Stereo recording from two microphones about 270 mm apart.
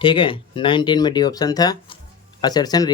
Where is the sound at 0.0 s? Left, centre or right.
Centre.